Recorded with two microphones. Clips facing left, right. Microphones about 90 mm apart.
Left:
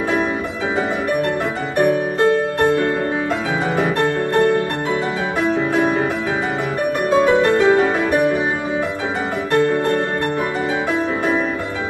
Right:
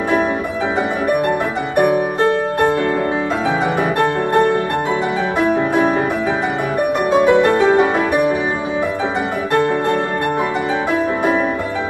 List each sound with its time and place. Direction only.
7.2 s music: 15° right (ahead or behind)